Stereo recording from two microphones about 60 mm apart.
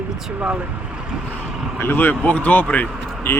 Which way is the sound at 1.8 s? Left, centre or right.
Left.